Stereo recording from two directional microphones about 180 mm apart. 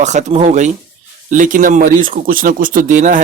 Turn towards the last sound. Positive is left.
turn(degrees=-45)  # may be behind; listen again after turning